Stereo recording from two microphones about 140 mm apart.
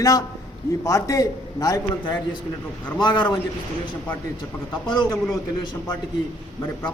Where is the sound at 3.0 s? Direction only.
35° left (ahead or behind).